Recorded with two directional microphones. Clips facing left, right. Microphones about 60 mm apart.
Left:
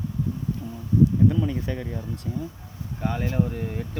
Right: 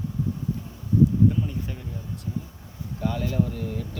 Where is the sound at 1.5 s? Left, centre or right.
Left.